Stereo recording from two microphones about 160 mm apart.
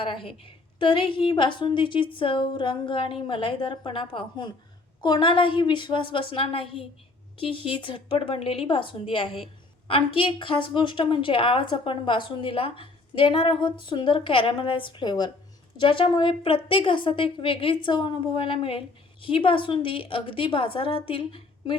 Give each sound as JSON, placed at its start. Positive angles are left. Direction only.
{"t": 0.0, "sound": "speech", "side_deg": 35}